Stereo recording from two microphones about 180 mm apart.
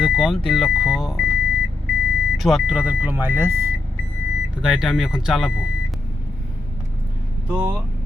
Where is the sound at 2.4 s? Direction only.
Centre (ahead or behind).